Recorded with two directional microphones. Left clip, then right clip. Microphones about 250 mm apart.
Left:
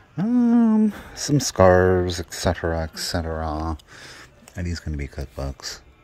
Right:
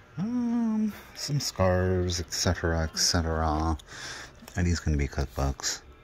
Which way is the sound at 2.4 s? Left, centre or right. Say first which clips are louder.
Left 6 dB; centre.